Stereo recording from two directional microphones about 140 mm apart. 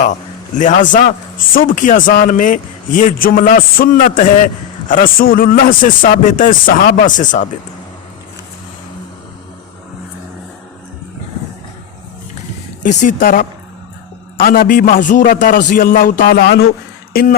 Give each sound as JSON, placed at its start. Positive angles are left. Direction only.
{"t": 0.6, "sound": "a man's voice", "side_deg": 65}
{"t": 12.8, "sound": "a man's voice", "side_deg": 65}